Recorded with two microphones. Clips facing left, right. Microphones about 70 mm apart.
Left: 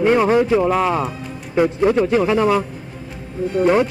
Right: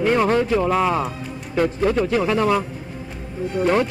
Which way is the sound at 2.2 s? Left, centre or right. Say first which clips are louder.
Left 3 dB; centre.